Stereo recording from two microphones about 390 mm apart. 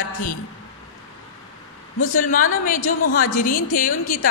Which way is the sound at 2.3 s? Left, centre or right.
Left.